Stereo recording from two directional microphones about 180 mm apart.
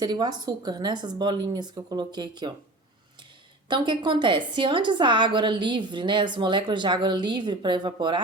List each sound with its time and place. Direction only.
0.0 s a woman's voice: 25° right (ahead or behind)
3.7 s a woman's voice: 25° right (ahead or behind)